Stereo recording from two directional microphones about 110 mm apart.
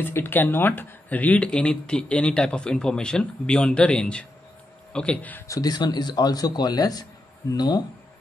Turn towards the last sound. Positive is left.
turn(degrees=40)  # may be behind; listen again after turning